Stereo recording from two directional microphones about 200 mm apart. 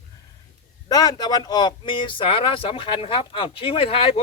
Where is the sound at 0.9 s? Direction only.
20° left (ahead or behind).